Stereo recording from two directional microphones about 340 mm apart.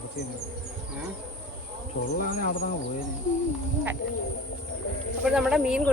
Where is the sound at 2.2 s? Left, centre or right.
Left.